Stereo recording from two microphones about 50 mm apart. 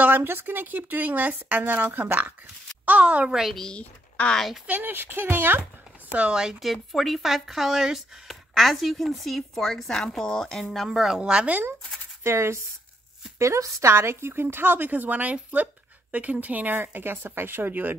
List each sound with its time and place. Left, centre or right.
0.0 s speech: right
2.8 s speech: right
3.3 s a woman's voice: centre
3.5 s speech: centre
4.6 s speech: right
6.1 s speech: right
6.6 s speech: centre
10.9 s speech: centre
11.1 s a woman's voice: centre
12.2 s speech: right
13.4 s speech: right